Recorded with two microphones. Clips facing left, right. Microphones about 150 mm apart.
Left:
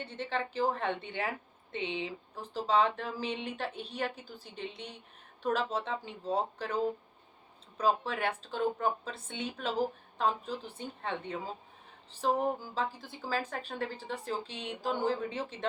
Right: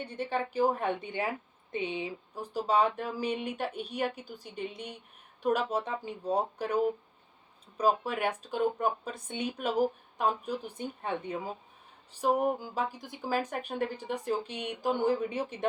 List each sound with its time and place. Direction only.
0.0 s speech: 15° right (ahead or behind)